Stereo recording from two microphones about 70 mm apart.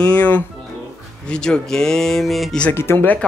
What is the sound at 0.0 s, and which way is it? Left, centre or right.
Speech, left.